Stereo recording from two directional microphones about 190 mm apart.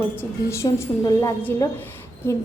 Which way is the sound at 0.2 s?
15° left (ahead or behind).